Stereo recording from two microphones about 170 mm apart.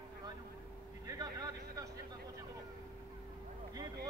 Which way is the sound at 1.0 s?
20° right (ahead or behind).